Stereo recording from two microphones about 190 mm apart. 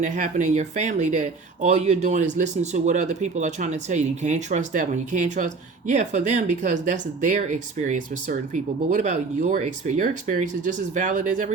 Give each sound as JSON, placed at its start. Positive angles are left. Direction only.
{"t": 0.0, "sound": "speech", "side_deg": -40}